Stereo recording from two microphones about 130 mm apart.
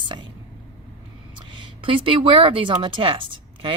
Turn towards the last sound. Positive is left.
turn(degrees=-40)  # may be behind; listen again after turning